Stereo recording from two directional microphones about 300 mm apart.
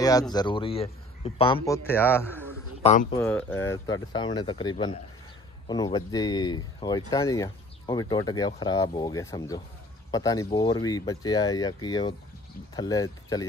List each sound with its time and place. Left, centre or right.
0.0 s speech: centre
2.8 s speech: left
3.2 s speech: centre